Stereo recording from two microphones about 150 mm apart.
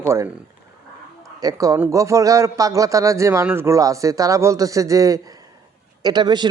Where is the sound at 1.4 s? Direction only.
20° right (ahead or behind).